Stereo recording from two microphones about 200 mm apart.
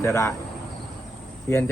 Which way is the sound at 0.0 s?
15° left (ahead or behind).